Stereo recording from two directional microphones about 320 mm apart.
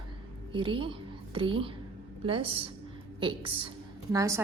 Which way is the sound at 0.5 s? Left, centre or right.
Centre.